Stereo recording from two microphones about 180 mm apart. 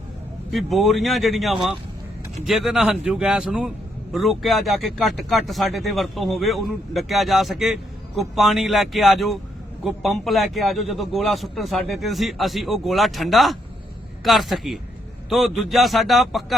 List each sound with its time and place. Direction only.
0.5 s speech: centre (ahead or behind)